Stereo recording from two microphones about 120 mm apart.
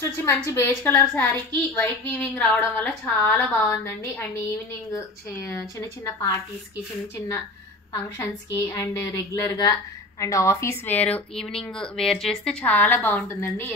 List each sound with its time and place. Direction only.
0.2 s a woman's voice: 20° left (ahead or behind)
4.9 s speech: 25° left (ahead or behind)
7.9 s a woman's voice: 15° left (ahead or behind)